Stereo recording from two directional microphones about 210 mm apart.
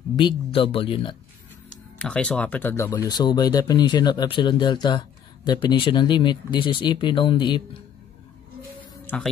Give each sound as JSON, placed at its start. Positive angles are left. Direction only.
{"t": 0.1, "sound": "speech", "side_deg": 20}
{"t": 2.0, "sound": "speech", "side_deg": 5}
{"t": 9.0, "sound": "a sound", "side_deg": 5}